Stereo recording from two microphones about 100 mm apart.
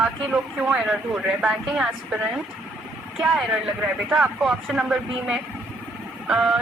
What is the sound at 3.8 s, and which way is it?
A woman's voice, 5° right (ahead or behind).